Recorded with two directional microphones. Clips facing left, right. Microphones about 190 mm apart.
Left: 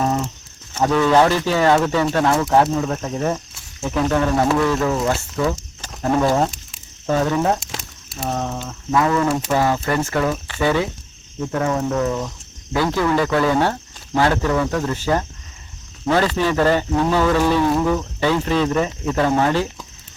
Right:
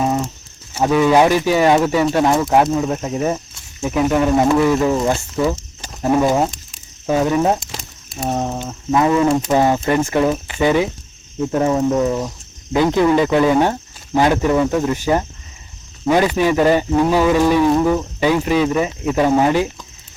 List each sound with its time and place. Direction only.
0.7 s speech: 10° right (ahead or behind)